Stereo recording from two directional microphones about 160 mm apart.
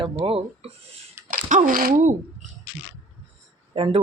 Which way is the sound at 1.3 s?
55° right (ahead or behind).